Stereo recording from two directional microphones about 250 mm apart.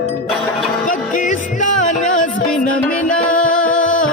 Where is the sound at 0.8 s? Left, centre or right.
Left.